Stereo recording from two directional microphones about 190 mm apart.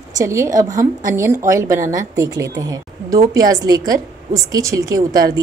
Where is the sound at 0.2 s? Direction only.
15° right (ahead or behind).